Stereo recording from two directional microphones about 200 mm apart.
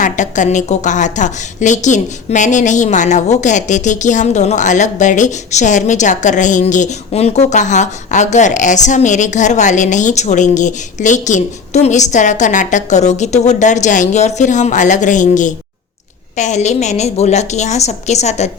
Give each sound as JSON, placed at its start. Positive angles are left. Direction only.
{"t": 0.0, "sound": "a woman's voice", "side_deg": 40}